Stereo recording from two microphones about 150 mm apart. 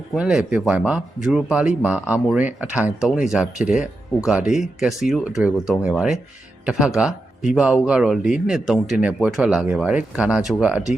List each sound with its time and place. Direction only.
0.1 s speech: 5° right (ahead or behind)